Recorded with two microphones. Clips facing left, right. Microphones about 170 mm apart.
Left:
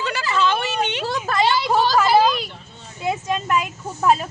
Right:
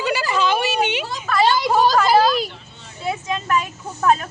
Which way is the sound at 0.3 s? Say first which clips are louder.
Even; 10° right (ahead or behind).